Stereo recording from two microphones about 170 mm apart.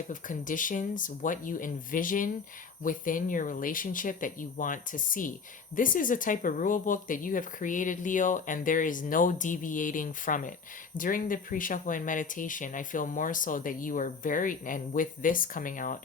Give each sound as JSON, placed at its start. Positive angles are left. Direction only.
{"t": 0.1, "sound": "speech", "side_deg": 50}